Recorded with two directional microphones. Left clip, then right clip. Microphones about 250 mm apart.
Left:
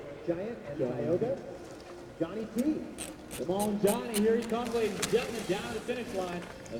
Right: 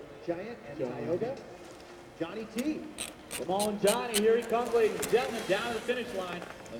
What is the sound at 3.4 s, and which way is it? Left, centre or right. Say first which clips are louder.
Speech: right 1 dB; centre.